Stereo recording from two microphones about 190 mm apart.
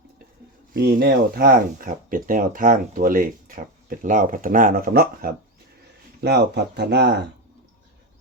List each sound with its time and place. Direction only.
0.7 s speech: 55° right (ahead or behind)
6.2 s speech: 60° right (ahead or behind)